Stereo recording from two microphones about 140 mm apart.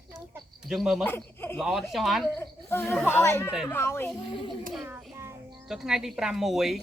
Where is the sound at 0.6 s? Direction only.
Centre (ahead or behind).